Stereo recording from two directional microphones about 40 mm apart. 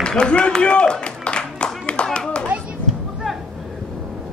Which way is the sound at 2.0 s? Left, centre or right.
Left.